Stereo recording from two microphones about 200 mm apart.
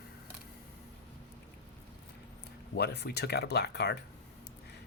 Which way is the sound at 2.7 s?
55° left (ahead or behind).